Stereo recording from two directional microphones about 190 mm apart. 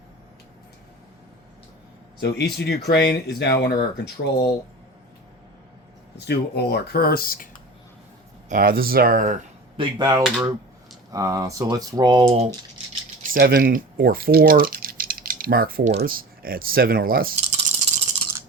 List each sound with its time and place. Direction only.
2.2 s speech: 60° left (ahead or behind)
6.1 s speech: 60° left (ahead or behind)
8.4 s speech: 50° right (ahead or behind)
9.7 s speech: 20° right (ahead or behind)
13.2 s speech: 50° right (ahead or behind)
17.4 s rattle: 35° right (ahead or behind)